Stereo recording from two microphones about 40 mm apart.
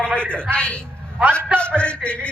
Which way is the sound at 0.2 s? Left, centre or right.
Left.